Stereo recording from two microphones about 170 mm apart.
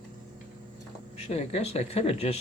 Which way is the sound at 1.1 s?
35° left (ahead or behind).